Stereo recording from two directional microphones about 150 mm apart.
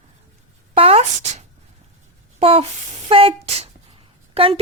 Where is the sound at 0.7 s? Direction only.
40° right (ahead or behind).